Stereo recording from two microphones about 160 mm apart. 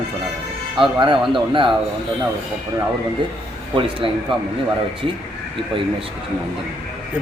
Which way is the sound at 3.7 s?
30° right (ahead or behind).